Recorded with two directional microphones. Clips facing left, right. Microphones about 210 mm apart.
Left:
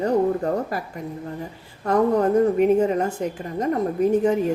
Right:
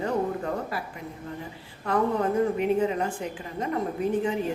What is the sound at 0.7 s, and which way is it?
A woman's voice, 40° left (ahead or behind).